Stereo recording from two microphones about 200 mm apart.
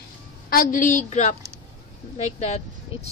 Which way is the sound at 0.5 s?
45° left (ahead or behind).